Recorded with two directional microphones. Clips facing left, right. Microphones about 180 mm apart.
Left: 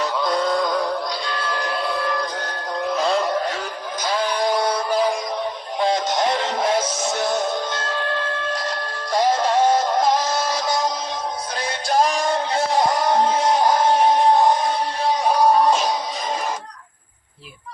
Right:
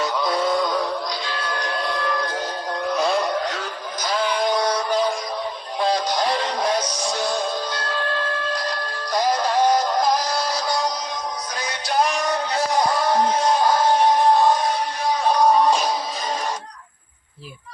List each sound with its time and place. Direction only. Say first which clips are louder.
0.0 s synthetic singing: left 1 dB; centre (ahead or behind)
1.5 s a sound: left 1 dB; 5° left (ahead or behind)
2.8 s music: left 1 dB; centre (ahead or behind)
4.2 s synthetic singing: even; 5° left (ahead or behind)
5.8 s music: left 1 dB; 20° left (ahead or behind)
9.1 s synthetic singing: left 2 dB; 25° left (ahead or behind)
11.6 s music: left 2 dB; 30° left (ahead or behind)
15.4 s music: even; 5° left (ahead or behind)